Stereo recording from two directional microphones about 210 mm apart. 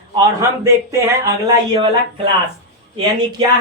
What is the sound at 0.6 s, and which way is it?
Speech, 15° right (ahead or behind).